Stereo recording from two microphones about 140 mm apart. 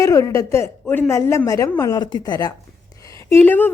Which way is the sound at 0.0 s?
25° left (ahead or behind).